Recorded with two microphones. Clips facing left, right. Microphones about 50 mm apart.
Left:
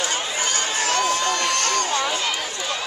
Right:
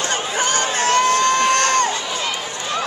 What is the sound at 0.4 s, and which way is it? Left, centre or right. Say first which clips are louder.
Crowd: right 7 dB; right.